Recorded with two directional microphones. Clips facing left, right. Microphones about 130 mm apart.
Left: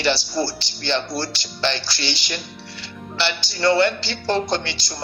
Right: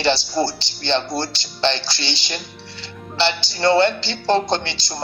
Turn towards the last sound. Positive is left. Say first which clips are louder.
# right 2 dB
turn(degrees=-25)  # may be behind; listen again after turning